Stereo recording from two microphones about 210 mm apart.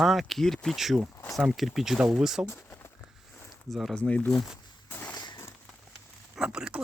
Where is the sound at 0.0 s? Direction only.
Centre (ahead or behind).